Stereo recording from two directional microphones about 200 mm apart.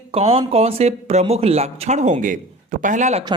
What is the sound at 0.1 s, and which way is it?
Speech, 30° right (ahead or behind).